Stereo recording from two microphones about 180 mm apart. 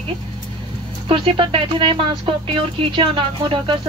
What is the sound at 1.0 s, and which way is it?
Speech, 30° right (ahead or behind).